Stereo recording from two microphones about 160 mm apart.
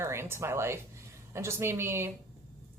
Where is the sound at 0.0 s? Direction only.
15° right (ahead or behind).